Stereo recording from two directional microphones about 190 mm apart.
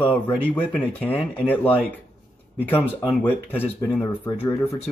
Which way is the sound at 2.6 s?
10° left (ahead or behind).